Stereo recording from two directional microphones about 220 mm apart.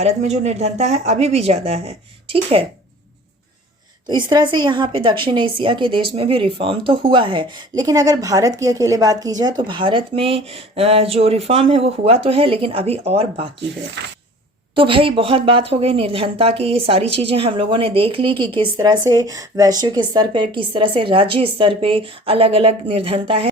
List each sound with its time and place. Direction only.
0.0 s speech: 30° right (ahead or behind)
4.0 s speech: 20° right (ahead or behind)
14.8 s speech: 25° right (ahead or behind)